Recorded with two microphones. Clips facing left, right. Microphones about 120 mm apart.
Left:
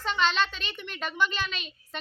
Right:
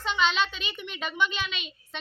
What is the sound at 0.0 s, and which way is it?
A child's voice, centre (ahead or behind).